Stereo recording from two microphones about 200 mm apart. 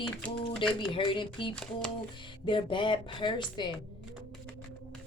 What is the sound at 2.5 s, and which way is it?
A woman's voice, 25° left (ahead or behind).